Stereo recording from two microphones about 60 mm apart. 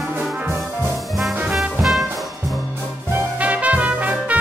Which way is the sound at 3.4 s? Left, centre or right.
Right.